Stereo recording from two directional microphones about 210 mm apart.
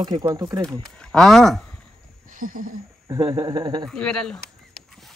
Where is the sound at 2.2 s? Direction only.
40° right (ahead or behind).